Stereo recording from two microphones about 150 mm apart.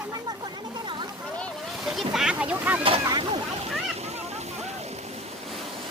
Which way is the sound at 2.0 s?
5° right (ahead or behind).